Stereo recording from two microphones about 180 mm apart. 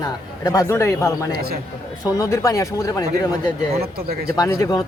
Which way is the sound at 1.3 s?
55° right (ahead or behind).